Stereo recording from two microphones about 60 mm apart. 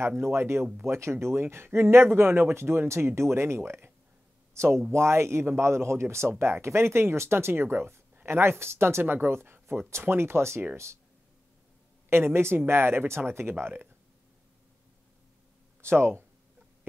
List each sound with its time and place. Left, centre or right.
0.2 s speech: right
12.1 s speech: right
15.8 s speech: right